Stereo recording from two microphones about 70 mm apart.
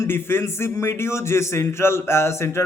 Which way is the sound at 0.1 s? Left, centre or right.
Left.